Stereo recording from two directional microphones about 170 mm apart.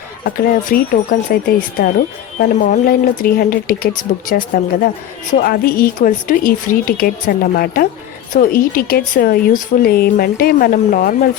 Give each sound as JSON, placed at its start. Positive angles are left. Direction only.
{"t": 0.3, "sound": "speech", "side_deg": 55}